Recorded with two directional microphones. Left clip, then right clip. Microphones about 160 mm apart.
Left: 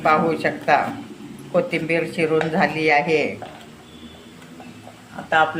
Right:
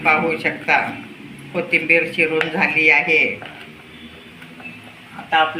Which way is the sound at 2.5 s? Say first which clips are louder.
Right 6 dB; 80° left.